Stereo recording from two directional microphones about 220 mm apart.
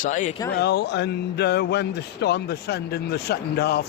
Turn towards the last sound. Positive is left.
turn(degrees=45)  # may be behind; listen again after turning